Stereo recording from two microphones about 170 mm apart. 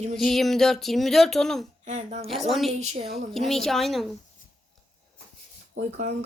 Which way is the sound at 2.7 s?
40° right (ahead or behind).